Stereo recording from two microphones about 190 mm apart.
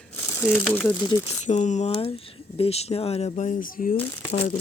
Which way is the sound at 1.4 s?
40° left (ahead or behind).